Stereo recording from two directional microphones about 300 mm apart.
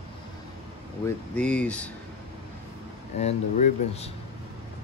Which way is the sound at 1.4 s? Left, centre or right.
Centre.